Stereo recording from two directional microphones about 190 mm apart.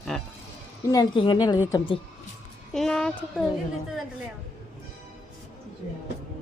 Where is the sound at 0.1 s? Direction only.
Centre (ahead or behind).